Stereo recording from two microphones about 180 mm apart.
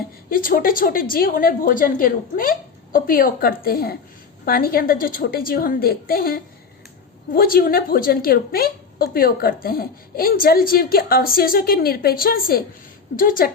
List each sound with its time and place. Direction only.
0.3 s a woman's voice: 50° left (ahead or behind)